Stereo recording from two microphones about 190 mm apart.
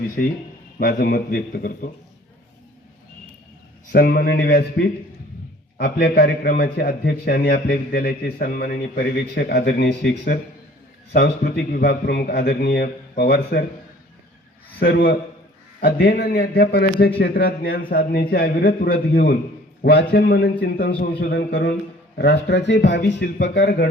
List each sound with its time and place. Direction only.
0.2 s a man's voice: 55° left (ahead or behind)
3.9 s a man's voice: 55° left (ahead or behind)
14.8 s a man's voice: 55° left (ahead or behind)